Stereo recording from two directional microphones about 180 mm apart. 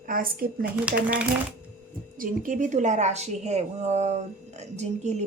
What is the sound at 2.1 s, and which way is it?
A woman's voice, 45° right (ahead or behind).